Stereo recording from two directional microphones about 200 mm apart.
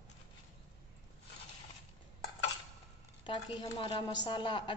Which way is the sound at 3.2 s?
25° left (ahead or behind).